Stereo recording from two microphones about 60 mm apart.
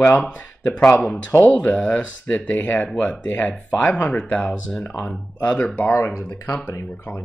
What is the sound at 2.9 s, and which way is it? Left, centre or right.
Speech, centre.